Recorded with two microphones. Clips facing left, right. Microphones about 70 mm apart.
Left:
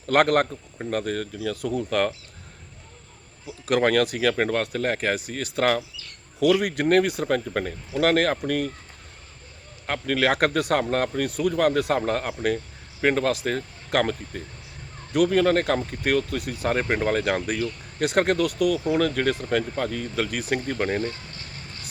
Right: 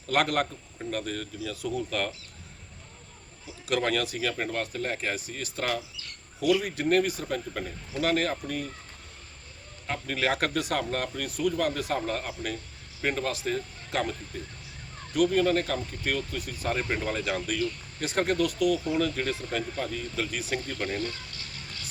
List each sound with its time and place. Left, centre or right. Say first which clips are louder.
0.1 s speech: left 7 dB; left
3.7 s speech: left 7 dB; left
9.8 s speech: left 6 dB; left
20.7 s a sound: left 6 dB; left